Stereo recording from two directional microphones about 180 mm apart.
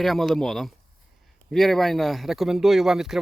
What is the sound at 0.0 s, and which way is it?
Speech, centre (ahead or behind).